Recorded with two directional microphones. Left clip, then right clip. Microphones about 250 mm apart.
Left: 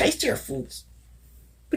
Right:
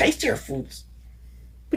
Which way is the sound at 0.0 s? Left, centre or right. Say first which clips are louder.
Right 2 dB; left.